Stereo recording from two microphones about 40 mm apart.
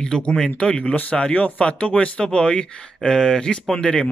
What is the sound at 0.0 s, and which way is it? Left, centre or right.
Speech, left.